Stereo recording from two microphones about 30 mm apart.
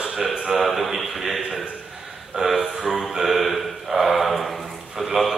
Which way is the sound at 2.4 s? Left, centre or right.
Right.